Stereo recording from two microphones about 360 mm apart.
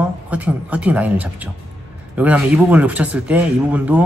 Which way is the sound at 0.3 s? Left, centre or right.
Centre.